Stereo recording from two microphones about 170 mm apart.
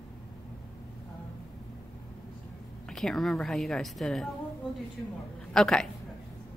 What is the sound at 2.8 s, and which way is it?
A woman's voice, 5° left (ahead or behind).